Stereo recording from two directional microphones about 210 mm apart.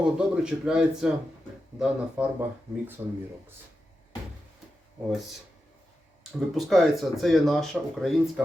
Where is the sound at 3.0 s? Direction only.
15° right (ahead or behind).